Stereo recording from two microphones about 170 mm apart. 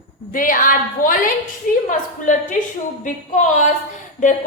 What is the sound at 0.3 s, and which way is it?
A woman's voice, 50° left (ahead or behind).